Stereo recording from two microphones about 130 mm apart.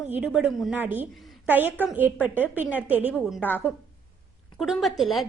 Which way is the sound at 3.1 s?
Centre (ahead or behind).